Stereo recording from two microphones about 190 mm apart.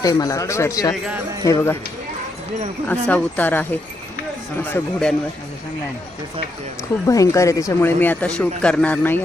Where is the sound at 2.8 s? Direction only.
10° left (ahead or behind).